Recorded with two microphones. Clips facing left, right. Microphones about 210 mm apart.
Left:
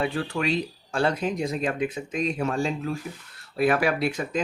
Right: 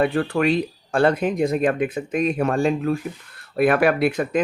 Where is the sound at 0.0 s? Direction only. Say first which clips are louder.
Right 7 dB; 55° right (ahead or behind).